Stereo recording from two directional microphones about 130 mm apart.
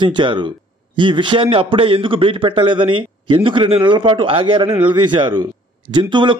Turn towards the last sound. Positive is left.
turn(degrees=-35)  # may be behind; listen again after turning